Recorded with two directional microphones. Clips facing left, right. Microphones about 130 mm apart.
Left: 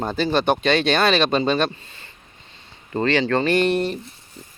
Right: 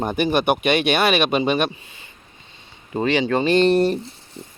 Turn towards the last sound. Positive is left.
turn(degrees=-35)  # may be behind; listen again after turning